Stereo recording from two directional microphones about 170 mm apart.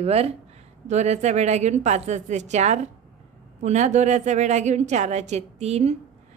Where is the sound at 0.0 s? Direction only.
35° right (ahead or behind).